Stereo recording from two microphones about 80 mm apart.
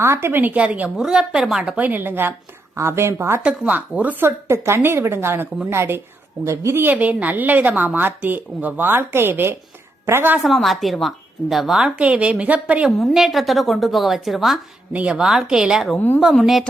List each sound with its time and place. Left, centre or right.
0.0 s a woman's voice: right
3.4 s a woman's voice: centre
4.3 s a woman's voice: right
6.8 s a woman's voice: centre
10.3 s a woman's voice: centre
13.0 s a woman's voice: centre
16.0 s speech: left
16.3 s a woman's voice: centre